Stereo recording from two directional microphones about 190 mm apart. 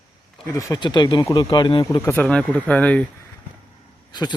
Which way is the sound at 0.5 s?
20° left (ahead or behind).